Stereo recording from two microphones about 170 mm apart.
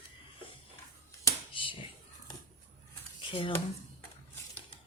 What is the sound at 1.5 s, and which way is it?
Whispering, 30° left (ahead or behind).